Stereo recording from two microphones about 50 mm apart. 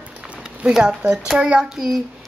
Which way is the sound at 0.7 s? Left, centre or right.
Centre.